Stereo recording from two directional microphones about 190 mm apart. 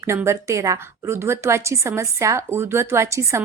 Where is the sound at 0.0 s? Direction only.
15° right (ahead or behind).